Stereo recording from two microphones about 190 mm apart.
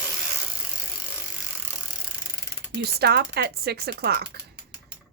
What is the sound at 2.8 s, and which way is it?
Speech, 55° right (ahead or behind).